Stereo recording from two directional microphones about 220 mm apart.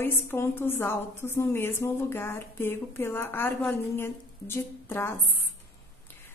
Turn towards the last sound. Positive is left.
turn(degrees=10)  # may be behind; listen again after turning